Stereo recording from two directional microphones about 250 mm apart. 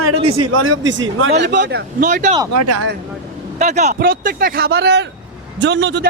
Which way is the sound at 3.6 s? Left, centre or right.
Right.